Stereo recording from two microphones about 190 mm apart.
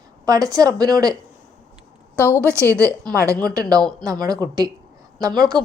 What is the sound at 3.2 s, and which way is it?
A woman's voice, 15° right (ahead or behind).